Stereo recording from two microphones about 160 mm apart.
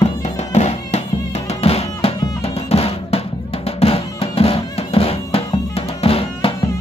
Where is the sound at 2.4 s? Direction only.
40° left (ahead or behind).